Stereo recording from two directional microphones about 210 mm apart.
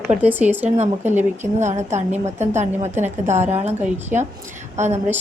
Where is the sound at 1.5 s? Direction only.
35° right (ahead or behind).